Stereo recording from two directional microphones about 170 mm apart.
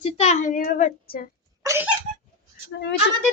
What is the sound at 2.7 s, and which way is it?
Speech, 90° left.